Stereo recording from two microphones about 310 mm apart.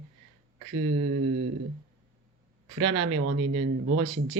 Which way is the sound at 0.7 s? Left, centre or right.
Right.